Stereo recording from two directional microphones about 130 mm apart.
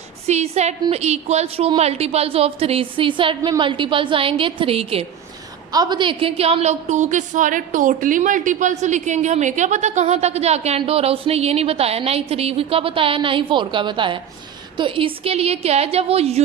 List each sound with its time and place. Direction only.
0.3 s a woman's voice: 55° right (ahead or behind)
5.7 s a woman's voice: 30° right (ahead or behind); by 16.4 s 50° right (ahead or behind)